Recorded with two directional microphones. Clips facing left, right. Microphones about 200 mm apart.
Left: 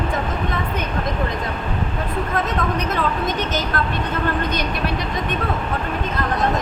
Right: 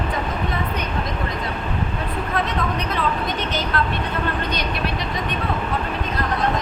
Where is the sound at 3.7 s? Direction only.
45° left (ahead or behind).